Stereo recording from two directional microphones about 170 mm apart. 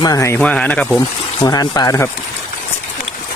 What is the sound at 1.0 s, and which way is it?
Speech, 20° left (ahead or behind).